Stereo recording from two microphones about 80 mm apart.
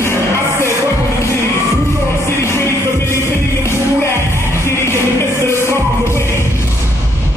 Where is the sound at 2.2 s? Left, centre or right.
Left.